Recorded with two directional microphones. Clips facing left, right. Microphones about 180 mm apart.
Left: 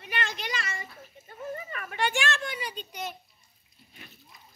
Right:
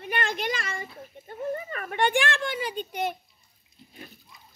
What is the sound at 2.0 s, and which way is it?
A woman's voice, 55° right (ahead or behind).